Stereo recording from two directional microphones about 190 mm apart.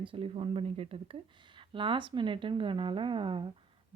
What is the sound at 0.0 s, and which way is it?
Speech, 30° right (ahead or behind).